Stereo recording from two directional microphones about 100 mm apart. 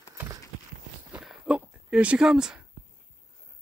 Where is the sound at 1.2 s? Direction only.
5° right (ahead or behind).